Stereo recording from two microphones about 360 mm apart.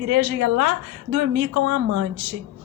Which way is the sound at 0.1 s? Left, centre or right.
Right.